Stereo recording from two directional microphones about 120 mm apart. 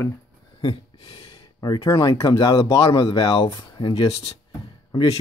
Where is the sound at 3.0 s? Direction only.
50° left (ahead or behind).